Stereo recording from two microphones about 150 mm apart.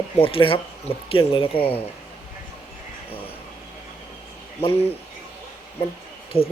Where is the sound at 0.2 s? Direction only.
35° left (ahead or behind).